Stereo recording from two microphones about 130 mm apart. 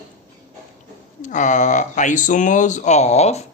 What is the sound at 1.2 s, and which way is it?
Speech, 70° left (ahead or behind).